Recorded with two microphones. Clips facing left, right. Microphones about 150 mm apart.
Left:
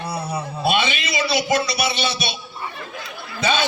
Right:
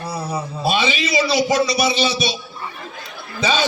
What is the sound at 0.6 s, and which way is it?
A man's voice, 55° left (ahead or behind).